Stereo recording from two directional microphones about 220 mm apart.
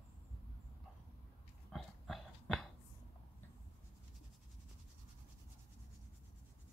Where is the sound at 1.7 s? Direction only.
Centre (ahead or behind).